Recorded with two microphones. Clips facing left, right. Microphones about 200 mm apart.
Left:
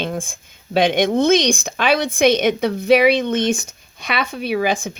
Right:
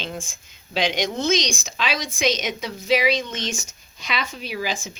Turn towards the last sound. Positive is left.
turn(degrees=55)  # may be behind; listen again after turning